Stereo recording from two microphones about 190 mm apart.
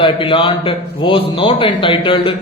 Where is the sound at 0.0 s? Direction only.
25° left (ahead or behind).